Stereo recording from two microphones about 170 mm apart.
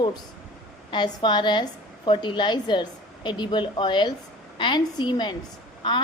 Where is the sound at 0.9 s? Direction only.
25° left (ahead or behind).